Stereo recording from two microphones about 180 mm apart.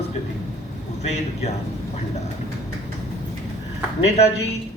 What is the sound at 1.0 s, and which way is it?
Speech, 40° left (ahead or behind).